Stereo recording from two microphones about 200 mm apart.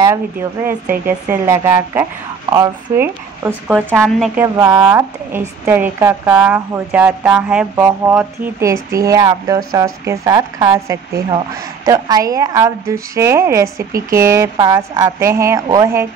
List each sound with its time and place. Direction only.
0.0 s a woman's voice: 10° right (ahead or behind)